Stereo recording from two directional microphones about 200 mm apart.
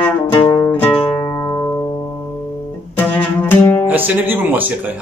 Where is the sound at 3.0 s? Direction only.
10° left (ahead or behind).